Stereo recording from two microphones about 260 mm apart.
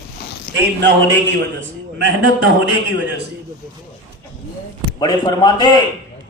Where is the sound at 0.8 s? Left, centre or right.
Right.